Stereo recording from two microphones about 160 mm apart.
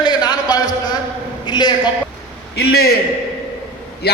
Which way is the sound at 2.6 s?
80° left.